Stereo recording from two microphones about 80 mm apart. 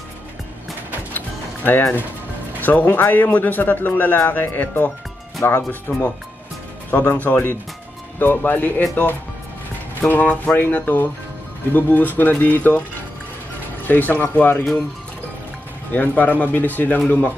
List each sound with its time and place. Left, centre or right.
1.1 s music: left
2.6 s speech: left
6.9 s speech: left
10.0 s speech: centre
13.8 s speech: left
15.9 s speech: left